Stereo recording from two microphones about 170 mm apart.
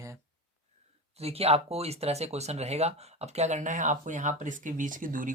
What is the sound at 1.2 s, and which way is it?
Speech, 35° right (ahead or behind).